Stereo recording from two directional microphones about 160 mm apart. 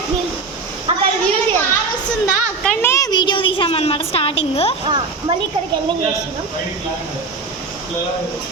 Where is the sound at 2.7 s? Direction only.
15° left (ahead or behind); by 4.7 s 35° left (ahead or behind).